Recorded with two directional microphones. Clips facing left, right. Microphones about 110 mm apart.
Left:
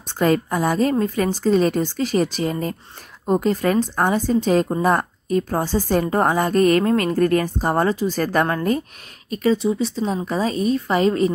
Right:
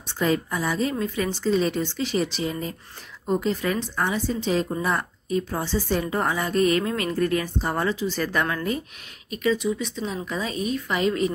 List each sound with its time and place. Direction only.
0.2 s a woman's voice: 50° left (ahead or behind)